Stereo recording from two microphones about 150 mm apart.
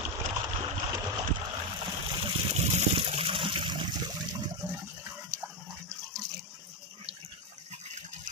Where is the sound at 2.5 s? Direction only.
45° right (ahead or behind).